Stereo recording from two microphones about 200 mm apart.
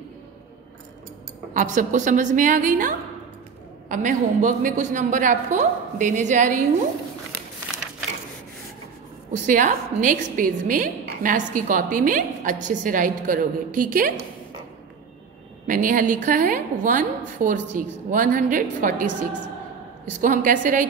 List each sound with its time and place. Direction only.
1.5 s a woman's voice: 40° right (ahead or behind)
3.9 s a woman's voice: 40° right (ahead or behind)
9.3 s a woman's voice: 40° right (ahead or behind)
15.6 s a woman's voice: 40° right (ahead or behind)
20.2 s a woman's voice: 40° right (ahead or behind)